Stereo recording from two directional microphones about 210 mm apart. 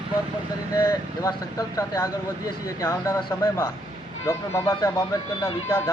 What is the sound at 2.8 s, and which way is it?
Speech, 15° left (ahead or behind).